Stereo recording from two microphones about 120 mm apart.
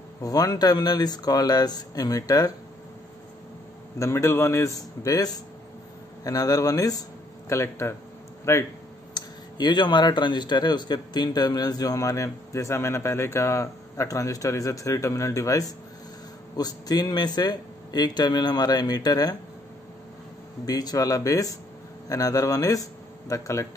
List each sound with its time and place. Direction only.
0.2 s speech: 30° left (ahead or behind)
4.0 s speech: 25° left (ahead or behind)
9.1 s speech: 35° left (ahead or behind)
20.6 s speech: 35° left (ahead or behind)